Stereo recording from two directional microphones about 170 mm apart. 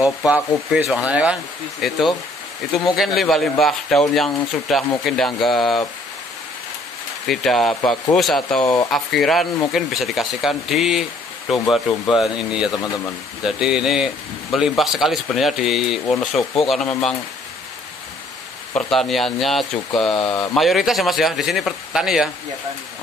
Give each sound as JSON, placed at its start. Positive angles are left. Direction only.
{"t": 0.3, "sound": "speech", "side_deg": -5}
{"t": 7.2, "sound": "speech", "side_deg": 0}
{"t": 12.7, "sound": "speech", "side_deg": 20}
{"t": 13.4, "sound": "speech", "side_deg": -5}
{"t": 18.7, "sound": "speech", "side_deg": 5}